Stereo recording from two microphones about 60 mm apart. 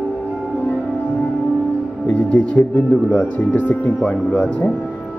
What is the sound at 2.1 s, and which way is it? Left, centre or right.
Speech, left.